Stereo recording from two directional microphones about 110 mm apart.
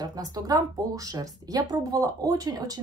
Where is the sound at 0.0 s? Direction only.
35° right (ahead or behind).